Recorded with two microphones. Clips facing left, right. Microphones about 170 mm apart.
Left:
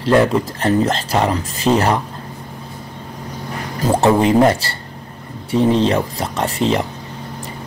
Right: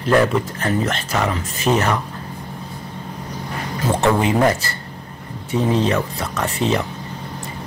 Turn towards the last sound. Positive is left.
turn(degrees=30)  # may be behind; listen again after turning